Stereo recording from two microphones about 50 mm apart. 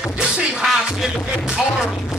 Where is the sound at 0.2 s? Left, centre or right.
Centre.